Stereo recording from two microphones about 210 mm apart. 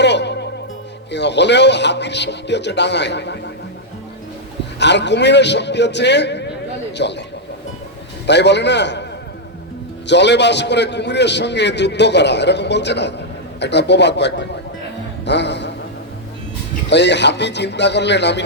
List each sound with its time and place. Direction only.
0.0 s music: 55° left (ahead or behind)
1.1 s a man's voice: 55° left (ahead or behind)
4.8 s a man's voice: 55° left (ahead or behind)
8.3 s a man's voice: 55° left (ahead or behind)
10.1 s a man's voice: 55° left (ahead or behind)
15.2 s music: 55° left (ahead or behind)
16.9 s a man's voice: 55° left (ahead or behind)